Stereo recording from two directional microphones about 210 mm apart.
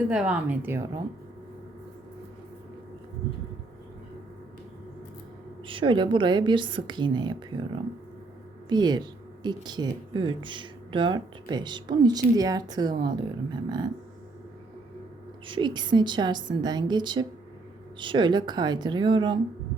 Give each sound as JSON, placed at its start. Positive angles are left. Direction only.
{"t": 0.1, "sound": "speech", "side_deg": -5}
{"t": 5.6, "sound": "speech", "side_deg": -25}
{"t": 15.4, "sound": "speech", "side_deg": -20}